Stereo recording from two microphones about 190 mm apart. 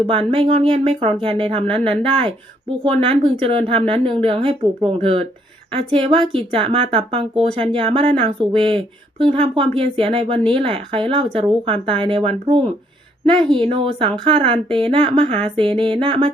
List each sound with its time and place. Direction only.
0.1 s speech: 25° right (ahead or behind)